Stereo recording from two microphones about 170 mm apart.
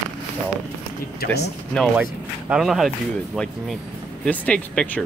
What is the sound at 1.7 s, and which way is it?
Speech, centre (ahead or behind).